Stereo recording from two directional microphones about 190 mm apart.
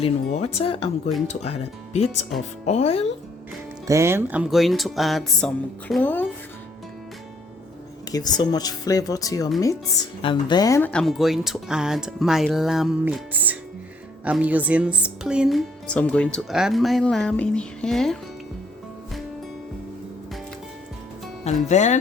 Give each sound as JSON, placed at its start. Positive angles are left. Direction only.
{"t": 0.3, "sound": "speech", "side_deg": 35}
{"t": 3.8, "sound": "a woman's voice", "side_deg": -15}
{"t": 8.1, "sound": "a woman's voice", "side_deg": 20}
{"t": 21.4, "sound": "speech", "side_deg": 40}